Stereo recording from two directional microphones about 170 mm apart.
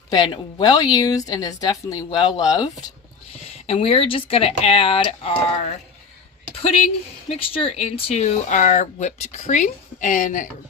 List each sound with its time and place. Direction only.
0.1 s speech: 25° left (ahead or behind)
3.4 s speech: 35° left (ahead or behind)
7.3 s speech: 35° left (ahead or behind); by 10.5 s 50° left (ahead or behind)